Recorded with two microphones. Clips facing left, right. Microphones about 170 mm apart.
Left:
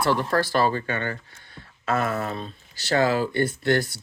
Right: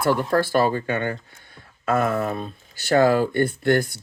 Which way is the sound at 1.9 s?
50° right (ahead or behind).